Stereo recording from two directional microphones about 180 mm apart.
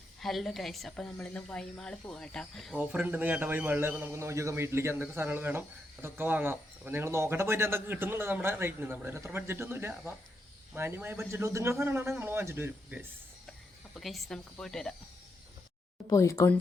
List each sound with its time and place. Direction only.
0.2 s speech: centre (ahead or behind)
2.7 s a man's voice: 10° right (ahead or behind)
13.9 s speech: centre (ahead or behind)
16.0 s speech: 15° left (ahead or behind)